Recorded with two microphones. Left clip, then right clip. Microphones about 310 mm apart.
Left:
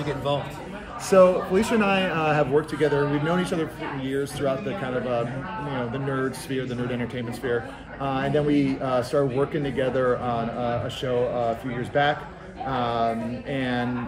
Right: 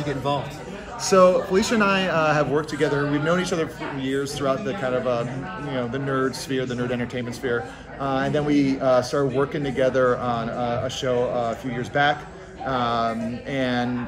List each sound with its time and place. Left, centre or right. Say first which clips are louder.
0.0 s a man's voice: right 1 dB; right
1.0 s a man's voice: right 1 dB; centre
8.0 s a man's voice: right 1 dB; centre